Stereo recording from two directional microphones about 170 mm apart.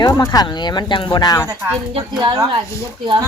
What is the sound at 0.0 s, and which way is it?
Speech, 20° left (ahead or behind).